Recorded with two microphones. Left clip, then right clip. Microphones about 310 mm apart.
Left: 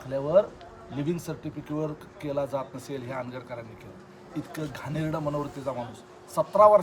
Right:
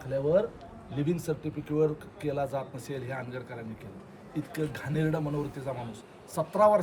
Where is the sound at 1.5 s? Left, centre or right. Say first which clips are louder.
Right 5 dB; centre.